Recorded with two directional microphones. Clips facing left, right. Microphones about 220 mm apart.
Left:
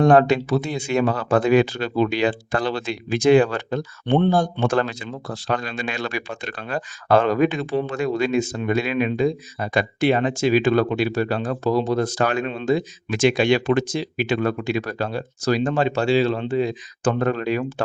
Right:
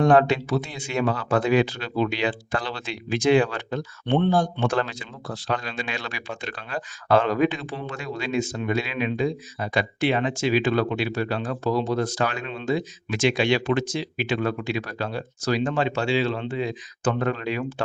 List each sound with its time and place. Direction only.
0.0 s speech: 40° left (ahead or behind)